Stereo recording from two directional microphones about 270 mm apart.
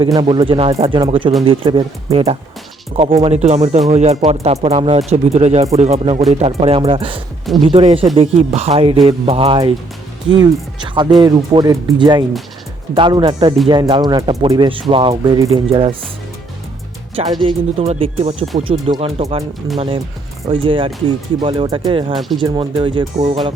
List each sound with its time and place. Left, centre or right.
0.0 s speech: centre
17.4 s speech: right
20.5 s speech: centre